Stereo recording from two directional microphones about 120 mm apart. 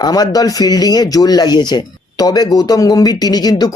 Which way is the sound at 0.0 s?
30° left (ahead or behind).